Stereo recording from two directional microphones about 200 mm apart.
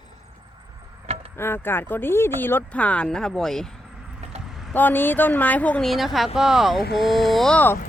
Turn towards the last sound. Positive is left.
turn(degrees=5)  # may be behind; listen again after turning